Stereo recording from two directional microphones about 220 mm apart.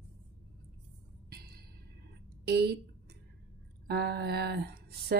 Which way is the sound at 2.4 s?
50° right (ahead or behind).